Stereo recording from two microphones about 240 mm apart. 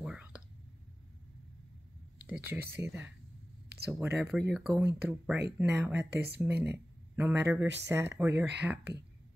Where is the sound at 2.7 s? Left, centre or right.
Centre.